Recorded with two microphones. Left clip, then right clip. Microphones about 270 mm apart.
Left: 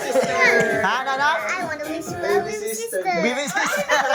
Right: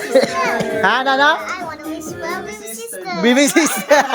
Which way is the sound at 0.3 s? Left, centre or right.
Right.